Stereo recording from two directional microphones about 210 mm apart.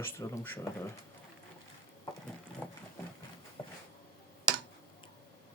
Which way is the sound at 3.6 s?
10° left (ahead or behind).